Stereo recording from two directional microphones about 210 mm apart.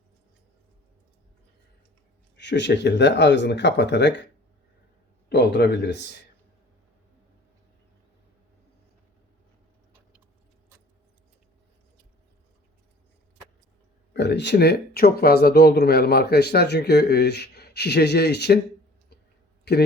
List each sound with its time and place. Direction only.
2.3 s speech: 55° left (ahead or behind)
5.3 s speech: 50° left (ahead or behind)
14.1 s speech: 55° left (ahead or behind)
19.7 s speech: 50° left (ahead or behind)